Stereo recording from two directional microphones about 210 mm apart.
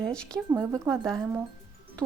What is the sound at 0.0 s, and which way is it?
A woman's voice, 5° left (ahead or behind).